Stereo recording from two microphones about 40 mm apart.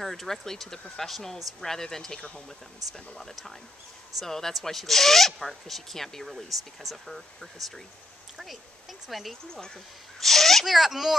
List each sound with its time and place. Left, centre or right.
0.0 s speech: centre
2.1 s speech: left
2.9 s speech: centre
6.2 s speech: centre
9.1 s speech: centre
10.7 s a child's voice: centre